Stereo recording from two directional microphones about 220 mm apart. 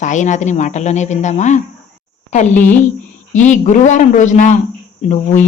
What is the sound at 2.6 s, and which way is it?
Speech, 10° left (ahead or behind).